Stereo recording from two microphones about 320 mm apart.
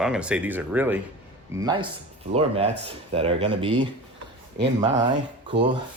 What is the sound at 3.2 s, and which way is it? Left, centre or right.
Speech, centre.